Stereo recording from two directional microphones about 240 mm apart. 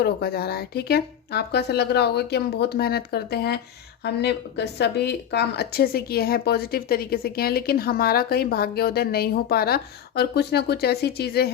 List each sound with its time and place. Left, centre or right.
0.0 s a woman's voice: left